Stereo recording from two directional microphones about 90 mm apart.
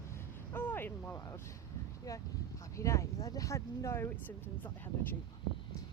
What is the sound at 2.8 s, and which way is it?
Speech, 35° left (ahead or behind).